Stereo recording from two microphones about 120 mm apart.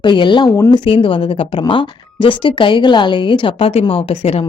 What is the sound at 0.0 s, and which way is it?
Speech, 40° left (ahead or behind).